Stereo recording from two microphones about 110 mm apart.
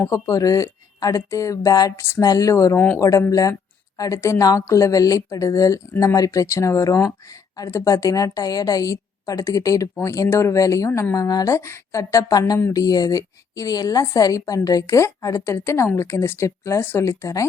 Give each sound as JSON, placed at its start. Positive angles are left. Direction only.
{"t": 0.0, "sound": "a woman's voice", "side_deg": 30}
{"t": 2.7, "sound": "speech", "side_deg": 15}
{"t": 3.0, "sound": "a woman's voice", "side_deg": 30}